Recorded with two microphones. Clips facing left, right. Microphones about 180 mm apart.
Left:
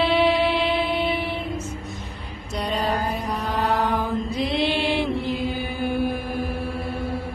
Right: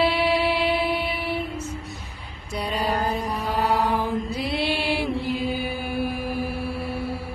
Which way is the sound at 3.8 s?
10° right (ahead or behind).